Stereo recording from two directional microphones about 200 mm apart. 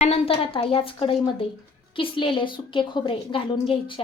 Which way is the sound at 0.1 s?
30° left (ahead or behind).